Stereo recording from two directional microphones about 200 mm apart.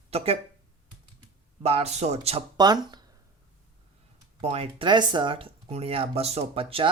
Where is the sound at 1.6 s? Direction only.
30° right (ahead or behind).